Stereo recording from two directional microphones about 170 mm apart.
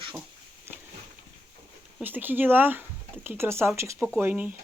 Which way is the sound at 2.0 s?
10° right (ahead or behind).